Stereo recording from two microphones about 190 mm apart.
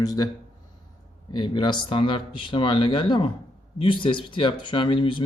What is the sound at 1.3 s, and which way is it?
Speech, 25° left (ahead or behind).